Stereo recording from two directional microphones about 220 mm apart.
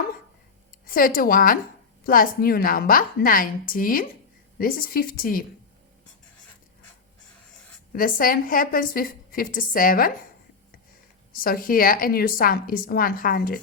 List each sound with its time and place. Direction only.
0.9 s a woman's voice: 40° left (ahead or behind)
7.9 s a woman's voice: 40° left (ahead or behind)
11.3 s a woman's voice: 40° left (ahead or behind)